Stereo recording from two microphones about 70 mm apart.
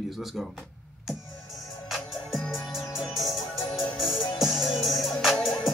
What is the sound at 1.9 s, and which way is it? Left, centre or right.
Music, centre.